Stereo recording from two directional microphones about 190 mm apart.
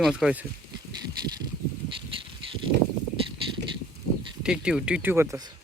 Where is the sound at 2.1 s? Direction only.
30° right (ahead or behind).